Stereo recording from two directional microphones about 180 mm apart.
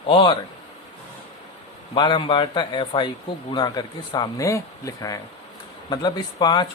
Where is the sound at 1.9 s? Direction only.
25° left (ahead or behind).